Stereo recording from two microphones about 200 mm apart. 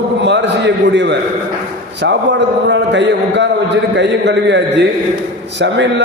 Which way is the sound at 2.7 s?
65° right (ahead or behind).